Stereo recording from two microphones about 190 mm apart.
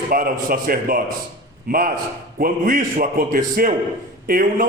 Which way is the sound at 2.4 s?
50° right (ahead or behind).